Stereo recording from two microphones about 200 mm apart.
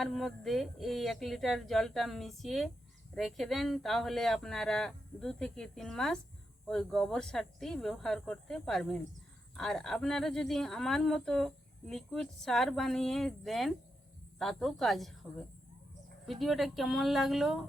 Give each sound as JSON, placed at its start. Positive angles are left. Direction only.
{"t": 0.0, "sound": "speech", "side_deg": 0}